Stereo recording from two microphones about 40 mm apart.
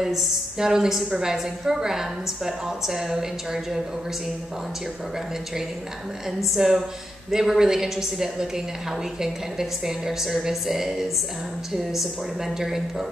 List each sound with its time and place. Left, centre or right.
0.0 s a woman's voice: centre
6.4 s a woman's voice: centre